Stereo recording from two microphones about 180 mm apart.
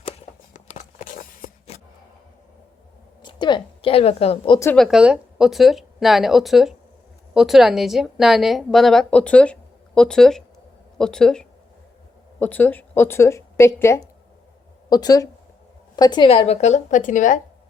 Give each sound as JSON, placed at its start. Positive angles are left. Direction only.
{"t": 0.5, "sound": "a sound", "side_deg": 45}
{"t": 3.2, "sound": "a woman's voice", "side_deg": 25}
{"t": 4.6, "sound": "speech", "side_deg": 10}
{"t": 4.9, "sound": "a woman's voice", "side_deg": -5}